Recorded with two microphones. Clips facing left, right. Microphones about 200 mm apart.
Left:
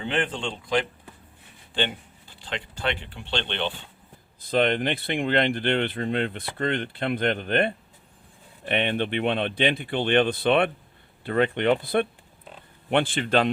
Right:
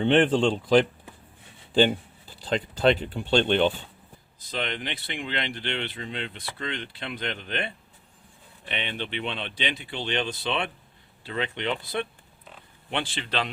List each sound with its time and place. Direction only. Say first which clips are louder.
0.0 s speech: right 8 dB; 30° right (ahead or behind)
2.4 s speech: right 8 dB; 40° right (ahead or behind)
4.4 s speech: left 10 dB; 55° left (ahead or behind)